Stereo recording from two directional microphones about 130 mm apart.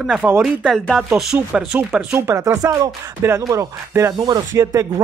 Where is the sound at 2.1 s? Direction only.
20° right (ahead or behind).